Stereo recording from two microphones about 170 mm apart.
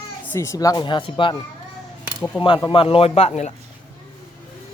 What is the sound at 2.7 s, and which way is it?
Speech, 30° left (ahead or behind).